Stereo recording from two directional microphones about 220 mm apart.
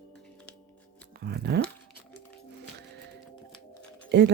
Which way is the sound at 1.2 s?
50° right (ahead or behind).